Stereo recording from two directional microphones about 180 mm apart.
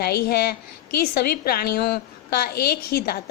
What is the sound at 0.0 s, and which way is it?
Speech, 60° left (ahead or behind).